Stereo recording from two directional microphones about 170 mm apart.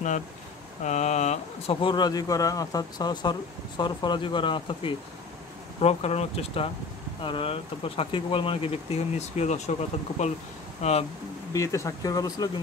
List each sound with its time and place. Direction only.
0.8 s speech: 45° left (ahead or behind)
11.5 s speech: 20° left (ahead or behind)